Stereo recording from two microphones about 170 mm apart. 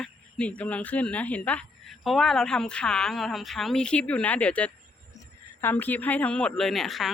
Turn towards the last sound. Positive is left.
turn(degrees=0)  # may be behind; listen again after turning